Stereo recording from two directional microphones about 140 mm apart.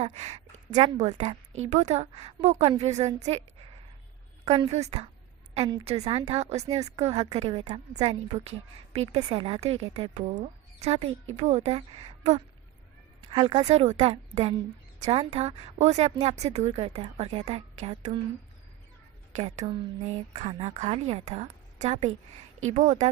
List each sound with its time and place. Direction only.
0.0 s a woman's voice: 50° right (ahead or behind)
4.7 s a woman's voice: 50° right (ahead or behind)
13.3 s speech: 35° right (ahead or behind)
13.7 s a woman's voice: 50° right (ahead or behind)
19.4 s a woman's voice: 45° right (ahead or behind)